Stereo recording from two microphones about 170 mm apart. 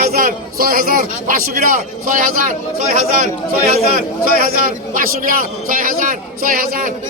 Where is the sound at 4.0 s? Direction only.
55° right (ahead or behind).